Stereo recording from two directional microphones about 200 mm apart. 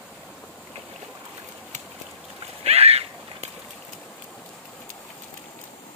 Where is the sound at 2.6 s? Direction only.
30° right (ahead or behind).